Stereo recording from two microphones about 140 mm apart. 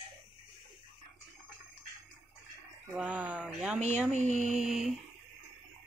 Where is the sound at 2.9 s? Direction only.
10° right (ahead or behind).